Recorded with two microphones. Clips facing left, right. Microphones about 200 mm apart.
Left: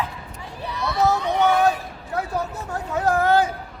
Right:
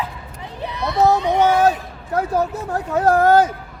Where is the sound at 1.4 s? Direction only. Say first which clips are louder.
Right 2 dB; 40° right (ahead or behind).